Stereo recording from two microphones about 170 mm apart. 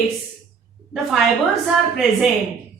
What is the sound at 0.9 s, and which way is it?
A woman's voice, centre (ahead or behind).